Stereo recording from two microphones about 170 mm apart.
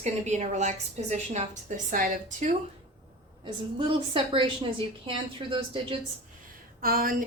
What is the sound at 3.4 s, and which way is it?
A woman's voice, 30° right (ahead or behind).